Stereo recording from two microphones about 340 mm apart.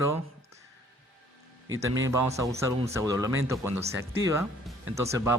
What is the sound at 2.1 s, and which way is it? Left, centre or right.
Speech, centre.